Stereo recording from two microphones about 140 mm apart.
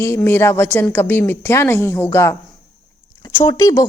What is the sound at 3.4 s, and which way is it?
Speech, 25° left (ahead or behind).